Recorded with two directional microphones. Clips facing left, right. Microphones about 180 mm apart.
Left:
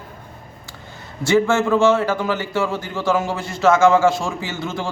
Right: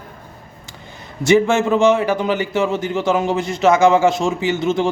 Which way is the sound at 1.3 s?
20° right (ahead or behind).